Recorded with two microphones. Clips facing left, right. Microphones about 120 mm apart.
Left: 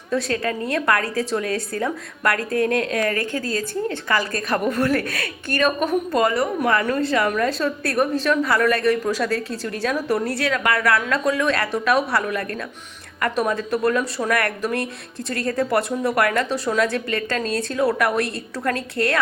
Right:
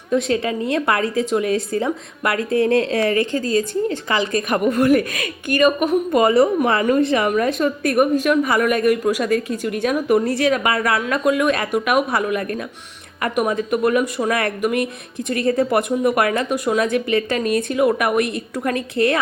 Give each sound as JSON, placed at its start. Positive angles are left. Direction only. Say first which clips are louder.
{"t": 0.1, "sound": "speech", "louder": "right 4 dB", "side_deg": -20}
{"t": 4.4, "sound": "a woman's voice", "louder": "right 4 dB", "side_deg": -10}
{"t": 11.3, "sound": "a woman's voice", "louder": "right 4 dB", "side_deg": -15}